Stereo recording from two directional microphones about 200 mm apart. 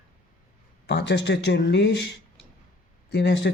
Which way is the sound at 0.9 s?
60° left (ahead or behind).